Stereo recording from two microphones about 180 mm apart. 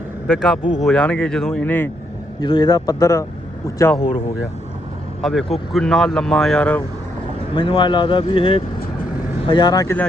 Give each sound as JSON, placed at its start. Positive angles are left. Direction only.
{"t": 0.3, "sound": "speech", "side_deg": 0}
{"t": 2.4, "sound": "speech", "side_deg": 25}
{"t": 5.2, "sound": "speech", "side_deg": 0}
{"t": 7.5, "sound": "speech", "side_deg": 25}